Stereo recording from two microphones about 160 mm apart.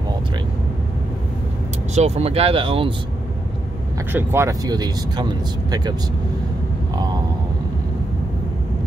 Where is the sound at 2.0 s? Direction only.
40° right (ahead or behind).